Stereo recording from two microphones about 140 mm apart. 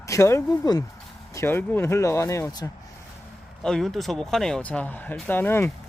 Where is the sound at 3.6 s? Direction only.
5° left (ahead or behind).